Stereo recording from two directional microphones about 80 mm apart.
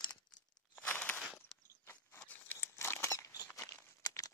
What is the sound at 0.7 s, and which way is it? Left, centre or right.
Crunch, centre.